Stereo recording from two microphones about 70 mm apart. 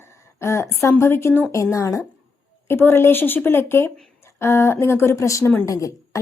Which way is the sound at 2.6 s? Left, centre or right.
Left.